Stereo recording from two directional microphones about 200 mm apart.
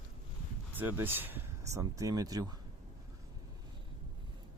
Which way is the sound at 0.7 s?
10° right (ahead or behind).